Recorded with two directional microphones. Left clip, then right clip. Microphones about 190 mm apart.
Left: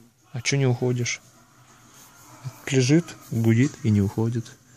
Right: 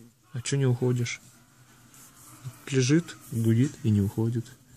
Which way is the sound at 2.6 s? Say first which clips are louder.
Left 4 dB; 20° left (ahead or behind).